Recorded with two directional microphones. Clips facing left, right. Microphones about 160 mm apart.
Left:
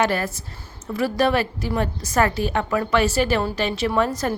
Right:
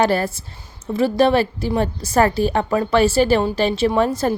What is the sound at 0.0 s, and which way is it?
A woman's voice, 30° right (ahead or behind).